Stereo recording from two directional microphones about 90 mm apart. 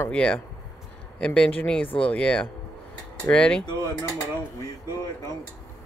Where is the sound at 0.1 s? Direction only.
10° left (ahead or behind).